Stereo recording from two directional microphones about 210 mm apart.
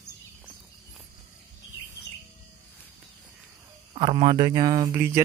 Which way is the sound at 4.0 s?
25° right (ahead or behind).